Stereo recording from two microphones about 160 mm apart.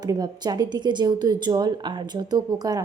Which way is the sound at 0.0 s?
25° right (ahead or behind).